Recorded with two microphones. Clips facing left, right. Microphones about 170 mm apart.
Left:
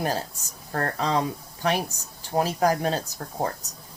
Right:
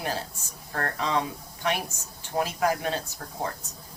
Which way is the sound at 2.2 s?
35° left (ahead or behind).